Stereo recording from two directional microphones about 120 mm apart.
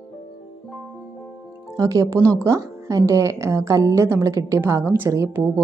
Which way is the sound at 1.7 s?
30° right (ahead or behind).